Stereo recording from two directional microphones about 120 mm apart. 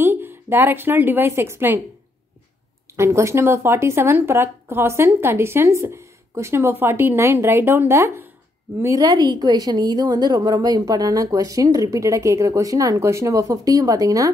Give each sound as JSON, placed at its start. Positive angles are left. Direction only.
{"t": 0.0, "sound": "speech", "side_deg": -15}
{"t": 3.0, "sound": "a woman's voice", "side_deg": -25}